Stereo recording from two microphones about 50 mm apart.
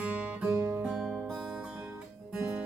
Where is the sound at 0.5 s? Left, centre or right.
Right.